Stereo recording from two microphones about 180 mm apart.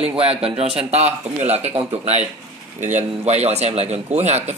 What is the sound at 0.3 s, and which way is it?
Speech, 30° right (ahead or behind).